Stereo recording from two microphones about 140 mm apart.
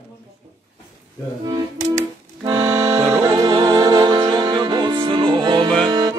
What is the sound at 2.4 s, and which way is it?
Accordion, 25° right (ahead or behind).